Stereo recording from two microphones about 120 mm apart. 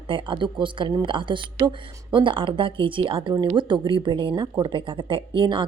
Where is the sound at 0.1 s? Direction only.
45° right (ahead or behind).